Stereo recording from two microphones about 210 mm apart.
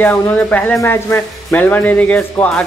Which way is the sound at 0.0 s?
10° left (ahead or behind).